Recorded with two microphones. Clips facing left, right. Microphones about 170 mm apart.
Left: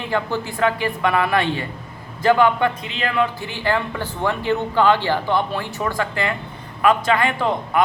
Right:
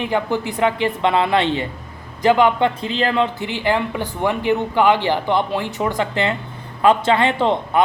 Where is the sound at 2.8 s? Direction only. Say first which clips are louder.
Right 3 dB; 35° right (ahead or behind).